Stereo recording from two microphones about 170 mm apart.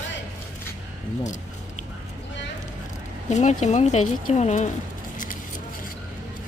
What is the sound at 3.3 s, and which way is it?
Speech, 45° left (ahead or behind).